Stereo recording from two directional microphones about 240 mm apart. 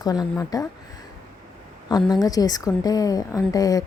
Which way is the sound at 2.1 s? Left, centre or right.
Centre.